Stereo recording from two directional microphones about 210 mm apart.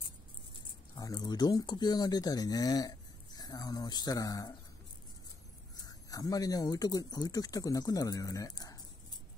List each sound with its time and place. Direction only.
0.9 s speech: 20° left (ahead or behind)
5.9 s speech: 15° left (ahead or behind)